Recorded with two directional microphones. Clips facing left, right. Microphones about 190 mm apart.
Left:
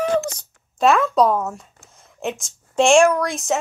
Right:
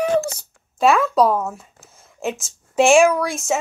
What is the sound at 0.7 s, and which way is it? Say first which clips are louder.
Speech: even; centre (ahead or behind).